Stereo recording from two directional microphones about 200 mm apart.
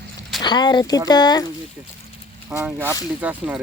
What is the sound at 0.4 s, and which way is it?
Speech, 20° left (ahead or behind).